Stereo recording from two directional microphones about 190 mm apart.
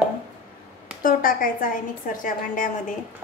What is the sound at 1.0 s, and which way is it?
A woman's voice, 50° left (ahead or behind).